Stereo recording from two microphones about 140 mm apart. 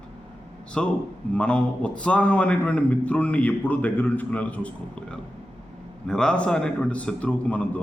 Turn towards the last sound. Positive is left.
turn(degrees=10)  # may be behind; listen again after turning